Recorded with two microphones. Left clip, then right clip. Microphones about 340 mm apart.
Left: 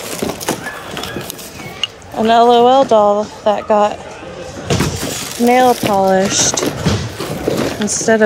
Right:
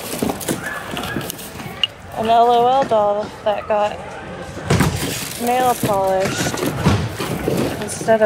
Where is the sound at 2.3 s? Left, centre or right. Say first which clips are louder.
Left 4 dB; left.